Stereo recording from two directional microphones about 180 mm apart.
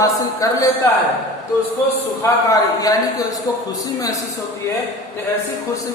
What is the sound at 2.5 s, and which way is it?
Speech, 20° left (ahead or behind).